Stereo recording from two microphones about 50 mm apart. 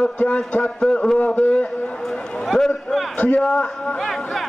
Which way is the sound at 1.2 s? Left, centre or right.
Left.